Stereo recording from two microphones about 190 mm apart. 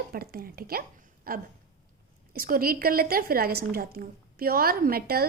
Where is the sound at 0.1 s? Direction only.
50° right (ahead or behind).